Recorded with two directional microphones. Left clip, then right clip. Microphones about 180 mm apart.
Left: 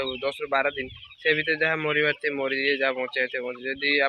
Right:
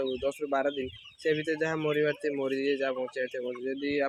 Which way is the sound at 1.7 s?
Centre (ahead or behind).